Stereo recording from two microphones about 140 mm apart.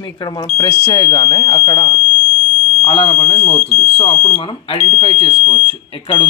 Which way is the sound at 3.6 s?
45° left (ahead or behind).